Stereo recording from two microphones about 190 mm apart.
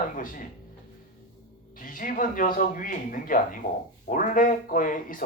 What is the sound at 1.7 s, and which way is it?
Speech, 45° left (ahead or behind).